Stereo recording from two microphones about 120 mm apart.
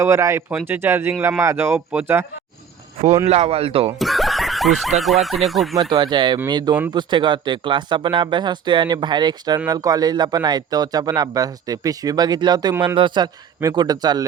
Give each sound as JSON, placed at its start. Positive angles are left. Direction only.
{"t": 0.0, "sound": "speech", "side_deg": -25}
{"t": 3.2, "sound": "speech", "side_deg": -60}
{"t": 3.9, "sound": "speech", "side_deg": 0}
{"t": 5.9, "sound": "speech", "side_deg": -40}